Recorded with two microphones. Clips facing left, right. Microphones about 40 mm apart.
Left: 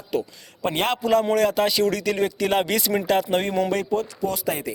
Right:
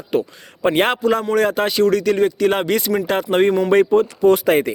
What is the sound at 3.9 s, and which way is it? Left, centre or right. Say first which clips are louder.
Speech: right 11 dB; right.